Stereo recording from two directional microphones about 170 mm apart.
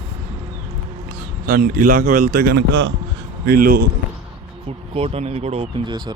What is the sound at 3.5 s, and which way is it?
Speech, 60° right (ahead or behind).